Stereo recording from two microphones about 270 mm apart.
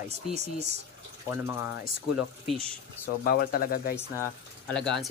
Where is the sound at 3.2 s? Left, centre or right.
Left.